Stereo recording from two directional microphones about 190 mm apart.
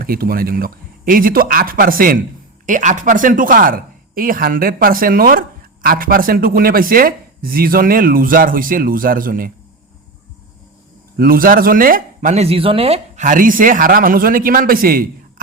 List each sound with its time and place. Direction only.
0.0 s speech: 50° right (ahead or behind)
11.2 s speech: 50° right (ahead or behind)